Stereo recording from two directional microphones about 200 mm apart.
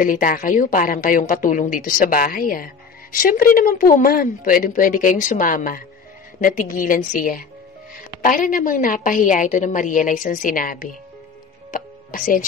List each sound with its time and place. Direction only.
0.0 s a woman's voice: 40° left (ahead or behind)
11.7 s music: 45° left (ahead or behind)